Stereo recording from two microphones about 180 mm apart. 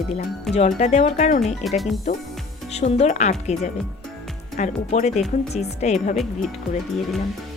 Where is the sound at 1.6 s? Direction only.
Centre (ahead or behind).